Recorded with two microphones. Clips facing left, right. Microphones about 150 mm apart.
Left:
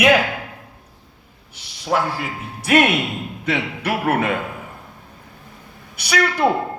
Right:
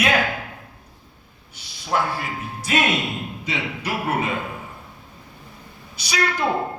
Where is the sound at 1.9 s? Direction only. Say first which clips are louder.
Left 3 dB; 90° left.